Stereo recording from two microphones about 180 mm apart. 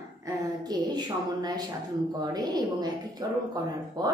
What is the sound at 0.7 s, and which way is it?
A woman's voice, 20° right (ahead or behind).